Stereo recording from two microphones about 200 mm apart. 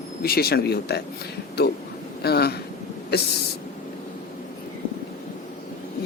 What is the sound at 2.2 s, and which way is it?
Speech, 55° left (ahead or behind).